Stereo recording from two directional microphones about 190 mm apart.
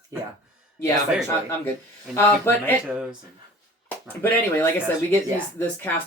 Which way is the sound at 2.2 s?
10° left (ahead or behind).